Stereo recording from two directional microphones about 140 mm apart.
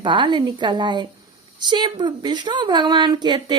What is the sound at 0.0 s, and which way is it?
A woman's voice, 35° right (ahead or behind).